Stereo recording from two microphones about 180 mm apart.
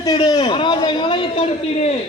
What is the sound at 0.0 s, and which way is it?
A man's voice, 20° left (ahead or behind).